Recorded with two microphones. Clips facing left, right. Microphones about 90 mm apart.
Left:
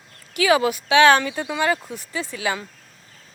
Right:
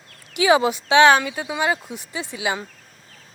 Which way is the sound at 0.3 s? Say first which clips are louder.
Right 1 dB; 20° right (ahead or behind).